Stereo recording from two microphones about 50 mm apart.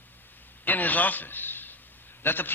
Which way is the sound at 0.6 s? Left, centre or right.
Left.